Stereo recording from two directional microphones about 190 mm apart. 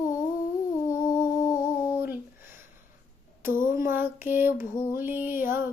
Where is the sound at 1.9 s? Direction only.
10° right (ahead or behind).